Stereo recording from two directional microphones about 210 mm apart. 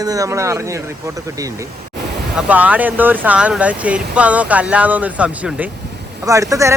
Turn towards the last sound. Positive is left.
turn(degrees=-15)  # may be behind; listen again after turning